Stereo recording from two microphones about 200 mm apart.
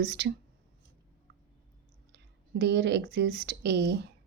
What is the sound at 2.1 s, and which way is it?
Speech, 55° right (ahead or behind).